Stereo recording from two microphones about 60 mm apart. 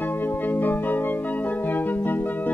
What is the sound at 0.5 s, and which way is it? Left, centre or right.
Music, left.